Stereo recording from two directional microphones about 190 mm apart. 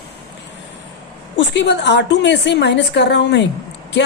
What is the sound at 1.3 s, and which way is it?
A woman's voice, 70° left (ahead or behind).